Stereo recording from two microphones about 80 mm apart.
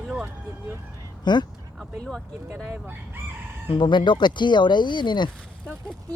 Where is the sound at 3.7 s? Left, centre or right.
Left.